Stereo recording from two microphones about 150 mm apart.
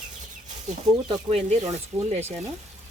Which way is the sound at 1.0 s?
45° right (ahead or behind).